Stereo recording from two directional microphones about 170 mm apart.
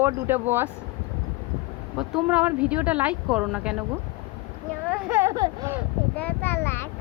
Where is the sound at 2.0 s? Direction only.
5° right (ahead or behind).